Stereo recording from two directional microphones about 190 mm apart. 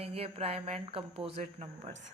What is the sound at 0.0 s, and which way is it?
Speech, 30° right (ahead or behind).